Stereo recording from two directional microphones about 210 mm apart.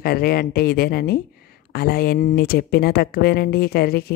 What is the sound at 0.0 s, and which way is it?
A woman's voice, 45° left (ahead or behind).